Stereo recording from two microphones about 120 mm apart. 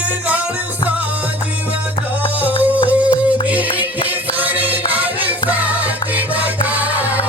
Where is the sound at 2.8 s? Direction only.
10° right (ahead or behind).